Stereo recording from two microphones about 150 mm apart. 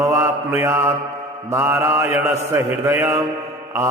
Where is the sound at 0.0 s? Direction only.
15° right (ahead or behind).